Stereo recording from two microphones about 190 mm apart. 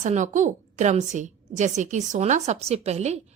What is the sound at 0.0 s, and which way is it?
A woman's voice, 40° right (ahead or behind).